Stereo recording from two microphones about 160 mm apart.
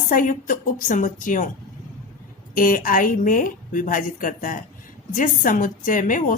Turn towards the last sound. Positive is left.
turn(degrees=55)  # may be behind; listen again after turning